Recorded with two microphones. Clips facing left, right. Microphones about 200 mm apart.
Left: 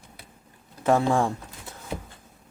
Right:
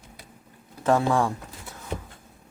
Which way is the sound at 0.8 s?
20° left (ahead or behind).